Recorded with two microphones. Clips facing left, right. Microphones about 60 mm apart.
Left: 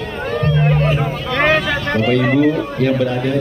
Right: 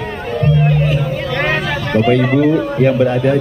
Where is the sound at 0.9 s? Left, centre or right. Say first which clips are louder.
Right 1 dB; centre.